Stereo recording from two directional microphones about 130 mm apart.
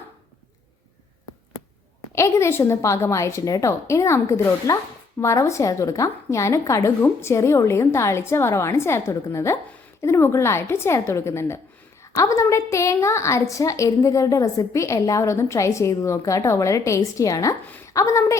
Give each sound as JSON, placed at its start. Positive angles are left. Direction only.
{"t": 2.1, "sound": "a woman's voice", "side_deg": 25}